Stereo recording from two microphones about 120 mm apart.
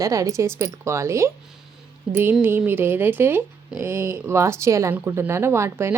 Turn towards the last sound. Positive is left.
turn(degrees=-20)  # may be behind; listen again after turning